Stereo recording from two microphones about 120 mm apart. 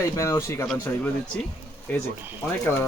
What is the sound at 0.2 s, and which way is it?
Speech, 25° left (ahead or behind).